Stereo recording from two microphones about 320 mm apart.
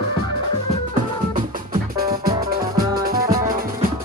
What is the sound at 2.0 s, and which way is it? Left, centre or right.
Music, right.